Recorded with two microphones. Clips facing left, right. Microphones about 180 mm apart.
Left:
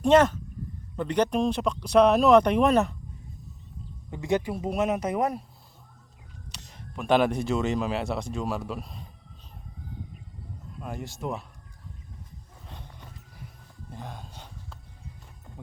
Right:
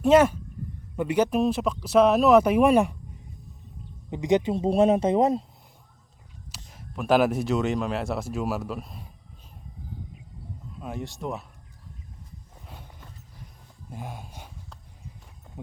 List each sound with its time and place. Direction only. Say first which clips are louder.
0.0 s speech: right 1 dB; 10° right (ahead or behind)
4.1 s a man's voice: right 4 dB; 20° right (ahead or behind)
6.7 s speech: right 1 dB; 5° right (ahead or behind)
10.8 s speech: right 2 dB; centre (ahead or behind)
13.9 s a sound: right 2 dB; 10° right (ahead or behind)
15.6 s speech: right 5 dB; 20° right (ahead or behind)